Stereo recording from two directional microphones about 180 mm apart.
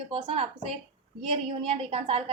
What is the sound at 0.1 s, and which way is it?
Speech, 30° right (ahead or behind).